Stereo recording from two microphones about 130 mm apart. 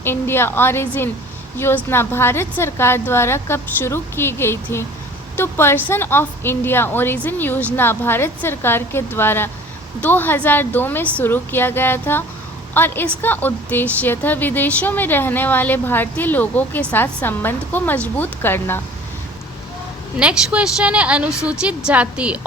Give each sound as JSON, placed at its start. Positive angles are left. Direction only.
{"t": 0.0, "sound": "a woman's voice", "side_deg": 15}
{"t": 20.1, "sound": "a woman's voice", "side_deg": -10}